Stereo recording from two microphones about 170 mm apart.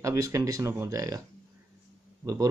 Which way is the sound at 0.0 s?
20° right (ahead or behind).